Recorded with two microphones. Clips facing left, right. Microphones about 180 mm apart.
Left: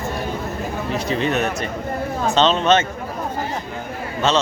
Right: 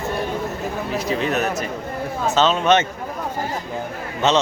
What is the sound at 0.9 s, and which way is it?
Speech, centre (ahead or behind).